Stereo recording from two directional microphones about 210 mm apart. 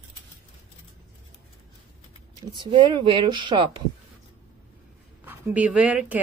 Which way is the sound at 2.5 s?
20° right (ahead or behind).